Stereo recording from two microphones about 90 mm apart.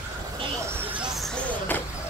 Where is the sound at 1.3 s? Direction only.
20° left (ahead or behind).